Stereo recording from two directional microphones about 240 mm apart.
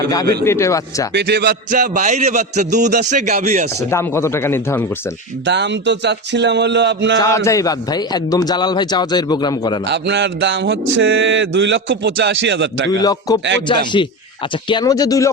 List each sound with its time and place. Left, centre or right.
0.1 s a man's voice: centre
1.1 s a sound: right
3.8 s a man's voice: centre
5.5 s mantra: right
7.2 s a man's voice: centre
9.8 s mantra: right
12.9 s a man's voice: centre
14.7 s a man's voice: centre